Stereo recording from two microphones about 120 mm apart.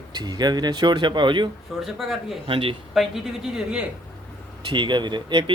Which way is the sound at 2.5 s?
50° right (ahead or behind).